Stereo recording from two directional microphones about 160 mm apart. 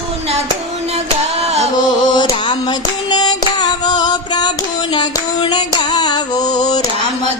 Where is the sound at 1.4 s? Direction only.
40° right (ahead or behind).